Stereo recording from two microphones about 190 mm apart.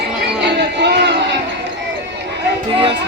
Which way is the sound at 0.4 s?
60° right (ahead or behind).